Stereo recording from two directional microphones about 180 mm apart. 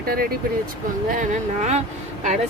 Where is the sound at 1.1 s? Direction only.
40° right (ahead or behind).